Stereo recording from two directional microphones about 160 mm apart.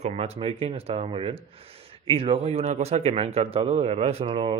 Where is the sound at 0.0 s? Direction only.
40° right (ahead or behind).